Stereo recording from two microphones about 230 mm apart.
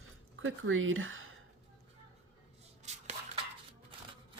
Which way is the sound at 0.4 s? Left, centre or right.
Right.